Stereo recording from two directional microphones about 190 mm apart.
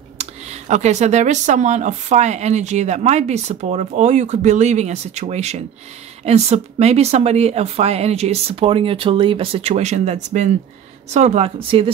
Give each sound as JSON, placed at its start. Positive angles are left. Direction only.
{"t": 0.2, "sound": "speech", "side_deg": -35}